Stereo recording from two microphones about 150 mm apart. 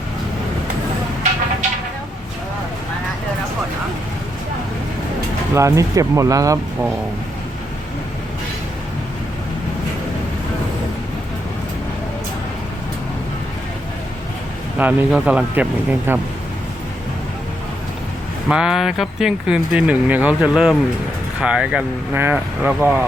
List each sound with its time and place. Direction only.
5.5 s speech: 20° right (ahead or behind)
14.8 s speech: 10° right (ahead or behind)
18.4 s speech: 5° right (ahead or behind)